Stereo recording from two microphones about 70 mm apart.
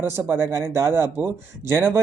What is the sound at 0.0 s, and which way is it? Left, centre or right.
Speech, right.